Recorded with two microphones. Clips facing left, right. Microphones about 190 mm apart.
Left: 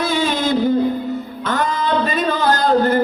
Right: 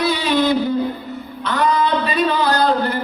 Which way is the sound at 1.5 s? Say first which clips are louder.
Right 2 dB; 45° left (ahead or behind).